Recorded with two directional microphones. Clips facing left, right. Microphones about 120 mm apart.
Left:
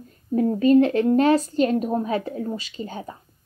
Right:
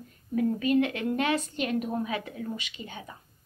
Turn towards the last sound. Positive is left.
turn(degrees=40)  # may be behind; listen again after turning